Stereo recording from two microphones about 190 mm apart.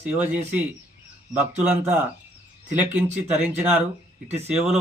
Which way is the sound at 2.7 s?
5° right (ahead or behind).